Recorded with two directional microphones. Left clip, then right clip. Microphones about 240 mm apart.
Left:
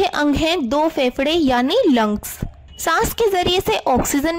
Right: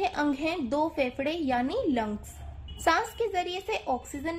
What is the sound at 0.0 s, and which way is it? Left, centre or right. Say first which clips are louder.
Speech: left 11 dB; left.